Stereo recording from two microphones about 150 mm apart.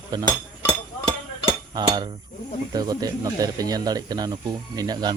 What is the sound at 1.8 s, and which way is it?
Cutlery, 30° right (ahead or behind).